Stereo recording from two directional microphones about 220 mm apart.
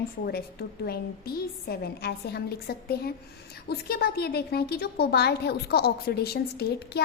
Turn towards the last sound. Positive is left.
turn(degrees=45)  # may be behind; listen again after turning